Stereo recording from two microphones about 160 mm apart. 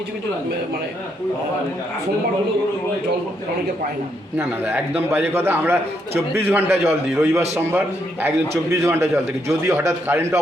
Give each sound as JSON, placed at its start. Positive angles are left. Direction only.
{"t": 4.4, "sound": "a man's voice", "side_deg": -10}
{"t": 8.7, "sound": "a man's voice", "side_deg": -15}